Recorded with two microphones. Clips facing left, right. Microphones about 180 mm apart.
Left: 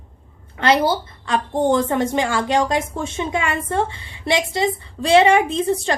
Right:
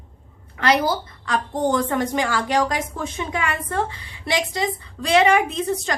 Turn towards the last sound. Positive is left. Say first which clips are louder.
# left 4 dB
turn(degrees=30)  # may be behind; listen again after turning